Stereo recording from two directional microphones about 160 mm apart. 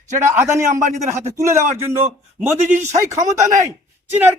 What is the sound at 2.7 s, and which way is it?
Speech, 45° right (ahead or behind).